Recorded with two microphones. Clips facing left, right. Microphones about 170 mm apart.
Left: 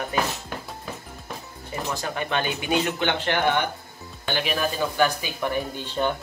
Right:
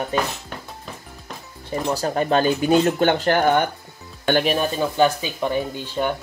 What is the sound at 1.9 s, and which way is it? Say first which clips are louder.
Speech: right 8 dB; 40° right (ahead or behind).